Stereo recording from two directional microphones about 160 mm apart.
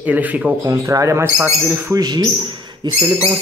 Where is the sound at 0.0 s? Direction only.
10° right (ahead or behind).